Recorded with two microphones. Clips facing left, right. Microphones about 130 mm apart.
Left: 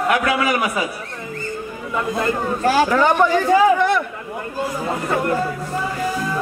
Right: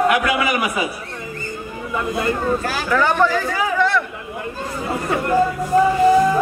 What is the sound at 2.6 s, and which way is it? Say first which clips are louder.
Speech: left 4 dB; 30° left (ahead or behind).